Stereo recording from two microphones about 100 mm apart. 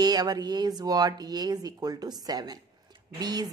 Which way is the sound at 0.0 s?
40° right (ahead or behind).